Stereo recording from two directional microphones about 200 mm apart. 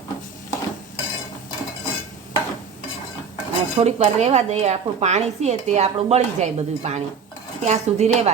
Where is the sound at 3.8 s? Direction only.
35° right (ahead or behind).